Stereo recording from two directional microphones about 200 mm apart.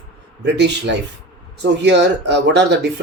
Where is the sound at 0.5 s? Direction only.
60° right (ahead or behind).